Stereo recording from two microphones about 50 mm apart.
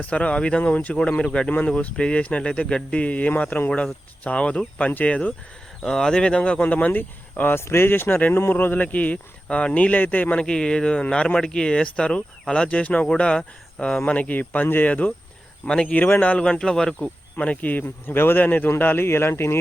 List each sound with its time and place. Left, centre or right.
0.0 s speech: left
0.9 s speech: centre
5.8 s speech: centre; by 7.5 s left
7.5 s speech: left
10.4 s speech: centre
14.0 s speech: left
15.6 s speech: left
16.0 s speech: left
16.4 s speech: centre
17.3 s speech: left
19.0 s speech: left